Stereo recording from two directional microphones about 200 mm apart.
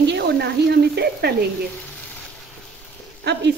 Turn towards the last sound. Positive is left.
turn(degrees=-55)  # may be behind; listen again after turning